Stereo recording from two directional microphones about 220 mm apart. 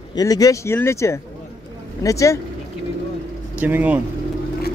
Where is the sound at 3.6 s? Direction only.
5° right (ahead or behind).